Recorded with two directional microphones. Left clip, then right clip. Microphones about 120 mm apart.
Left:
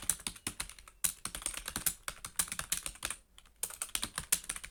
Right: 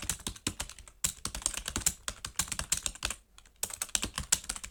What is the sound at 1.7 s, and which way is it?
Typing, 25° right (ahead or behind).